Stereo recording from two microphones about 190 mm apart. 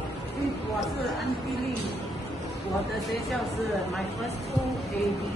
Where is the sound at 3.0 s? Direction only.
Centre (ahead or behind).